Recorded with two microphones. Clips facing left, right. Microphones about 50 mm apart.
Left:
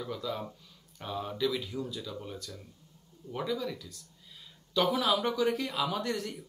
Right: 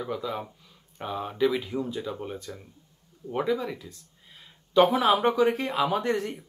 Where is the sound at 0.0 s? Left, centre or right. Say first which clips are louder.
Right 4 dB; right.